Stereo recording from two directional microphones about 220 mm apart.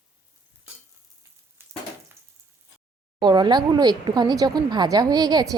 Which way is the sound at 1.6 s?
10° right (ahead or behind).